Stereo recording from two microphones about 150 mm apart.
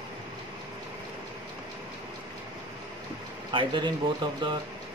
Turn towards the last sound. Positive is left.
turn(degrees=-30)  # may be behind; listen again after turning